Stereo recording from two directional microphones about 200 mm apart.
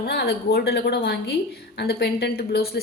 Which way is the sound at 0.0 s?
55° left (ahead or behind).